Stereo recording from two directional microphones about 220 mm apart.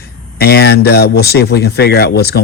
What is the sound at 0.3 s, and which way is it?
Speech, 45° left (ahead or behind).